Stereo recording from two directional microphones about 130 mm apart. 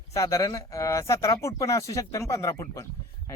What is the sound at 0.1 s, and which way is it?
A man's voice, 25° left (ahead or behind).